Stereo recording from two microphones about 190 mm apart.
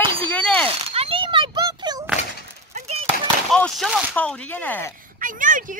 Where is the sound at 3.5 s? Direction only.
Centre (ahead or behind).